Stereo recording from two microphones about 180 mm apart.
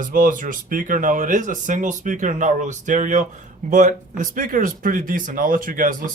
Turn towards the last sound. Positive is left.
turn(degrees=-50)  # may be behind; listen again after turning